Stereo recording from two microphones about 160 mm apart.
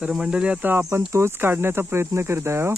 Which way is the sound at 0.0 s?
5° right (ahead or behind).